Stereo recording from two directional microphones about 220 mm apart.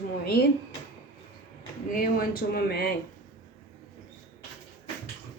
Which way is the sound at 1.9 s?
40° left (ahead or behind).